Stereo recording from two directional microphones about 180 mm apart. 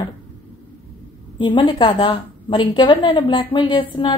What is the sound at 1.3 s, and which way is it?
A woman's voice, 25° left (ahead or behind).